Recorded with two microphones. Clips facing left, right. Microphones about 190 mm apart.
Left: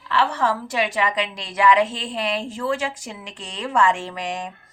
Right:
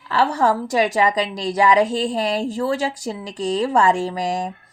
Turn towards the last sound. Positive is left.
turn(degrees=-40)  # may be behind; listen again after turning